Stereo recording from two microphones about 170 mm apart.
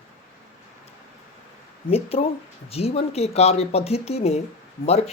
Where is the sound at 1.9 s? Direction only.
35° left (ahead or behind).